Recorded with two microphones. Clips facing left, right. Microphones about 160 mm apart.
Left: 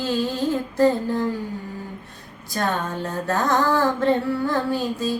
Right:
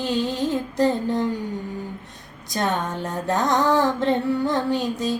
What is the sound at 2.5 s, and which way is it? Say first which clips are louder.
Female singing: right 1 dB; 20° right (ahead or behind).